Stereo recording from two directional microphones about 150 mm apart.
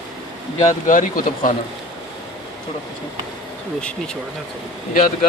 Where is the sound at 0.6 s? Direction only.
60° left (ahead or behind).